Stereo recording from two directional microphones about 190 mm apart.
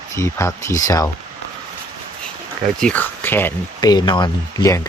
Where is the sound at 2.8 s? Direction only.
10° left (ahead or behind).